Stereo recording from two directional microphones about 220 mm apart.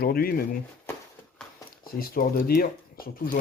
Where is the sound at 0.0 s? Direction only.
45° left (ahead or behind).